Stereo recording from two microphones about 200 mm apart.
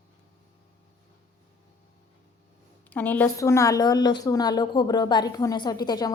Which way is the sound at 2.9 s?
10° left (ahead or behind).